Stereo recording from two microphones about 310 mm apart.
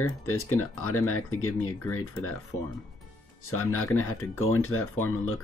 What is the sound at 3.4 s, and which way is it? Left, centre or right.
Speech, left.